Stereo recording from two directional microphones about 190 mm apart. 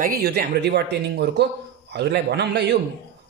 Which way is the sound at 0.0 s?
60° right (ahead or behind).